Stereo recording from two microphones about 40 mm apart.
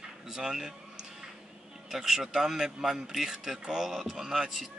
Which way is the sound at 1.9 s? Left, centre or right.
Centre.